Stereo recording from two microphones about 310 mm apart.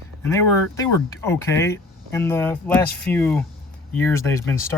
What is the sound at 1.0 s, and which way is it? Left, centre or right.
Speech, centre.